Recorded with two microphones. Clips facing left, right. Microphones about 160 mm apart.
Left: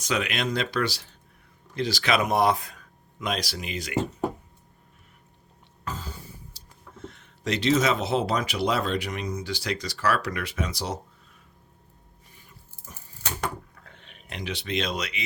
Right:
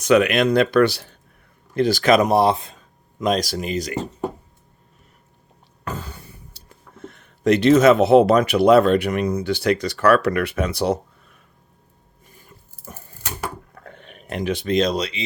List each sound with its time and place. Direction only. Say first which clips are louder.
0.0 s speech: right 12 dB; 60° right (ahead or behind); by 2.8 s 25° right (ahead or behind)
3.2 s speech: right 9 dB; 40° right (ahead or behind)
5.8 s speech: right 5 dB; 65° right (ahead or behind)
12.3 s a sound: right 6 dB; 45° right (ahead or behind)